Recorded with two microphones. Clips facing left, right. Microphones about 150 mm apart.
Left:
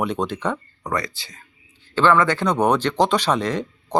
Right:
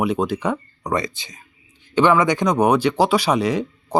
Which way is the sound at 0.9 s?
20° right (ahead or behind).